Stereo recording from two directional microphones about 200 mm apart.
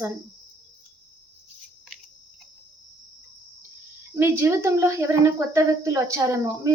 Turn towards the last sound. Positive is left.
turn(degrees=-15)  # may be behind; listen again after turning